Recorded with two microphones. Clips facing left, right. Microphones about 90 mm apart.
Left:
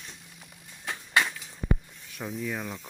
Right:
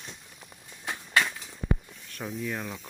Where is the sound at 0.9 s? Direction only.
5° right (ahead or behind).